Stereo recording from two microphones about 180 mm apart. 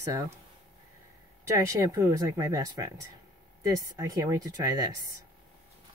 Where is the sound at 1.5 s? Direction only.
20° right (ahead or behind).